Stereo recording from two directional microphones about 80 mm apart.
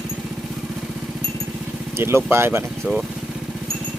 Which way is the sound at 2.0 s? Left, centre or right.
Right.